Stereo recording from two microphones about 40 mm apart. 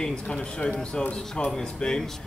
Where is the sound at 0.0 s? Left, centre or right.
Centre.